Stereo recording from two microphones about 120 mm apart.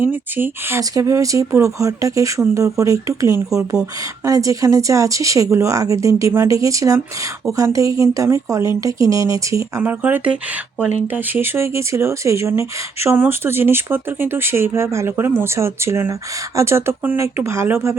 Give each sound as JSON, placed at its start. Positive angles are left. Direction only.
{"t": 0.0, "sound": "speech", "side_deg": -15}
{"t": 10.0, "sound": "speech", "side_deg": -15}